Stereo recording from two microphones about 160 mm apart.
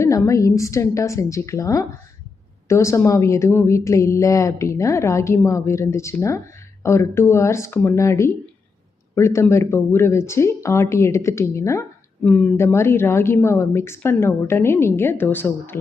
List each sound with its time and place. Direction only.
0.0 s a woman's voice: 20° left (ahead or behind)